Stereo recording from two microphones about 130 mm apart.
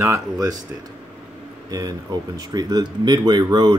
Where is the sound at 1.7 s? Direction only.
30° right (ahead or behind).